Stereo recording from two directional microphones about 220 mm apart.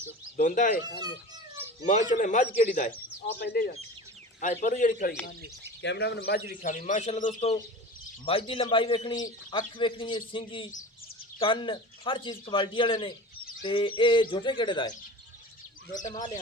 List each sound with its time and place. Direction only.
0.3 s a man's voice: 35° left (ahead or behind)
1.8 s a man's voice: 35° left (ahead or behind)
3.4 s speech: 45° left (ahead or behind)
4.6 s a man's voice: 35° left (ahead or behind)
5.8 s a man's voice: 50° left (ahead or behind); by 14.9 s 20° left (ahead or behind)
15.9 s a man's voice: 35° left (ahead or behind)